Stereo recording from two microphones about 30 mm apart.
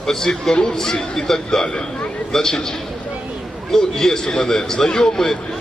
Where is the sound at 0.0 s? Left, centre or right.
Centre.